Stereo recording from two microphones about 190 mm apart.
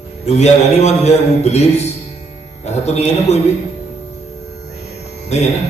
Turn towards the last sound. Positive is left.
turn(degrees=35)  # may be behind; listen again after turning